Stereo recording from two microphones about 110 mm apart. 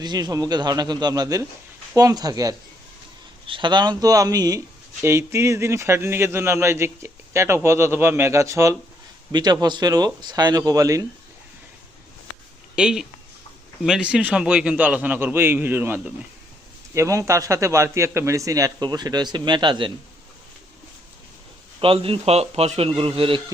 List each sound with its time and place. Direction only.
0.0 s speech: 35° right (ahead or behind)
3.4 s a man's voice: 50° right (ahead or behind); by 8.7 s 25° right (ahead or behind)
9.3 s speech: 40° right (ahead or behind)
12.7 s a man's voice: 5° right (ahead or behind); by 19.9 s 45° right (ahead or behind)
21.8 s a man's voice: 55° right (ahead or behind)